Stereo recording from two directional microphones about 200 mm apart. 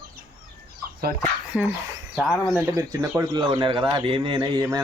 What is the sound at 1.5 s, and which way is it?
Speech, 10° right (ahead or behind).